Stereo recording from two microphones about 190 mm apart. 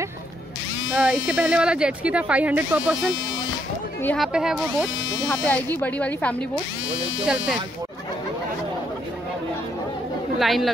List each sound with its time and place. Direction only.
0.9 s speech: 5° right (ahead or behind)
4.0 s speech: 5° left (ahead or behind)
4.3 s speech: 5° right (ahead or behind)
5.2 s speech: 10° left (ahead or behind)
10.4 s speech: centre (ahead or behind)